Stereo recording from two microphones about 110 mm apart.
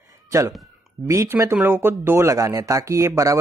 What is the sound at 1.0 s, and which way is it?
Speech, 25° right (ahead or behind).